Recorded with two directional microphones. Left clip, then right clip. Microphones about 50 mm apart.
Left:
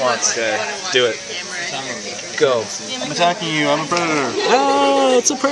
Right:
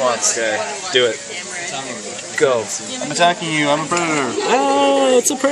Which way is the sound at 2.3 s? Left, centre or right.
Centre.